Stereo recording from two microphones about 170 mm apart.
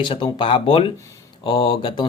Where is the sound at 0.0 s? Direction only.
30° left (ahead or behind).